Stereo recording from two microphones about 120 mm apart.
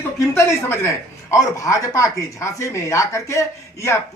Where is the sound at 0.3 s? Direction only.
20° left (ahead or behind).